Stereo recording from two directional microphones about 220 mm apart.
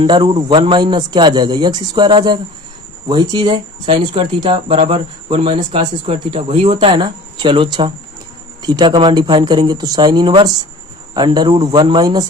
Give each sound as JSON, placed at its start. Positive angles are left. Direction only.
{"t": 0.0, "sound": "speech", "side_deg": -20}